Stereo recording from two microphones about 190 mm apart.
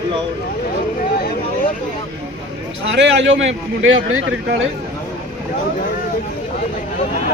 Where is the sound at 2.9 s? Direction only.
70° right (ahead or behind).